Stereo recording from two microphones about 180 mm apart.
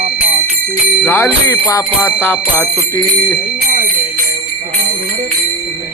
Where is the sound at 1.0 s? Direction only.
15° left (ahead or behind).